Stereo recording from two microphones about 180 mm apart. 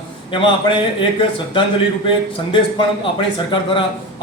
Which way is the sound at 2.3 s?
30° left (ahead or behind).